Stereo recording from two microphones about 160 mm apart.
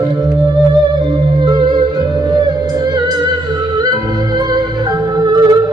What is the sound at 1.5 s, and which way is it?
Music, 25° right (ahead or behind).